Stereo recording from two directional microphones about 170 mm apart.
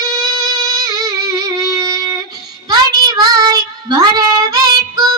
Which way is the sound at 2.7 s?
25° right (ahead or behind).